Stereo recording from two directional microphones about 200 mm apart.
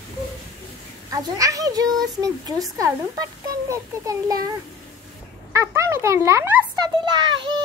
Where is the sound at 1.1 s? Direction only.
15° right (ahead or behind).